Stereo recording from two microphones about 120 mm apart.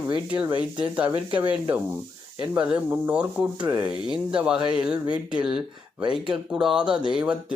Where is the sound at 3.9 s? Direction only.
40° left (ahead or behind).